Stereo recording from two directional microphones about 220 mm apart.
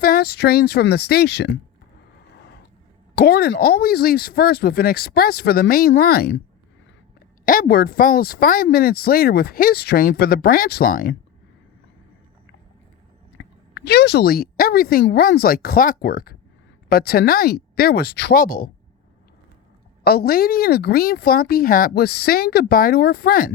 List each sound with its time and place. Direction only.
0.0 s speech: 45° left (ahead or behind)
3.2 s speech: 45° left (ahead or behind)
7.4 s speech: 40° left (ahead or behind)
13.3 s a woman's voice: 55° left (ahead or behind)
20.1 s speech: 45° left (ahead or behind)